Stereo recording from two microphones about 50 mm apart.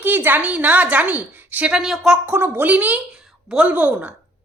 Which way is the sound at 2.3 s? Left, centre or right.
Right.